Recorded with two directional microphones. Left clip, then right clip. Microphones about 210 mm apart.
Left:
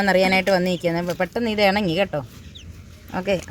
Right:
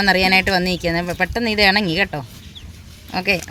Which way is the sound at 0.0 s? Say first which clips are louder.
Right 3 dB; 20° right (ahead or behind).